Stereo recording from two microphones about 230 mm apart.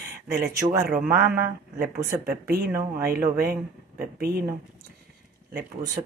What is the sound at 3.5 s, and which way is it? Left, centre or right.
Speech, right.